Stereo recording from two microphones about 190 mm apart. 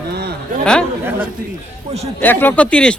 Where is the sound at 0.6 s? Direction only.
5° left (ahead or behind).